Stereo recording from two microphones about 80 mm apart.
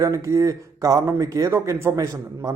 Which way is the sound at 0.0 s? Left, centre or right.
Right.